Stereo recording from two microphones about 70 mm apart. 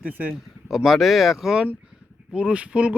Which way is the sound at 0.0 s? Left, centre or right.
Right.